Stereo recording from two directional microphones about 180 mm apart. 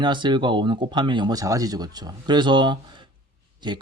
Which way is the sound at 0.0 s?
25° right (ahead or behind).